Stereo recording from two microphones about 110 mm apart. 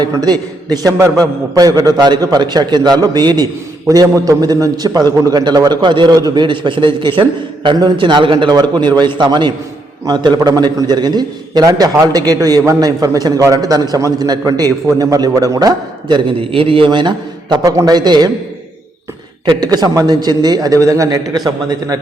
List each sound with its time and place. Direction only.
0.0 s a man's voice: 40° right (ahead or behind)
19.5 s a man's voice: 35° right (ahead or behind)